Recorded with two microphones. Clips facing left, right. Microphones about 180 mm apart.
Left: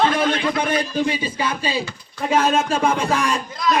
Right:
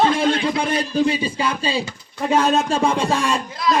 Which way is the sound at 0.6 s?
30° right (ahead or behind).